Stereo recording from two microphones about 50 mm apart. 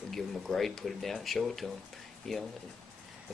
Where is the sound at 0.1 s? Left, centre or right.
Centre.